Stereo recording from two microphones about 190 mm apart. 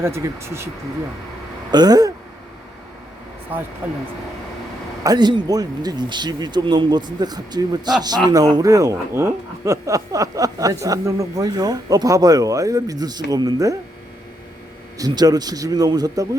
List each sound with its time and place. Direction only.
0.0 s speech: 15° right (ahead or behind)
1.7 s speech: 20° right (ahead or behind)
3.5 s speech: 10° right (ahead or behind)
5.0 s speech: 25° right (ahead or behind)
14.9 s speech: 20° right (ahead or behind)